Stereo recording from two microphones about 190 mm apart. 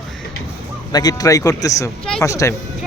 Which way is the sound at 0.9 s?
20° left (ahead or behind).